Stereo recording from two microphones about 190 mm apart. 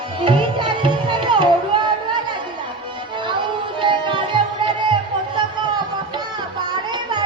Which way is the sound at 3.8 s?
25° right (ahead or behind).